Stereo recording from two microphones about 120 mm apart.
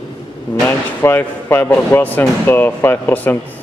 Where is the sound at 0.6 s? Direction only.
15° left (ahead or behind).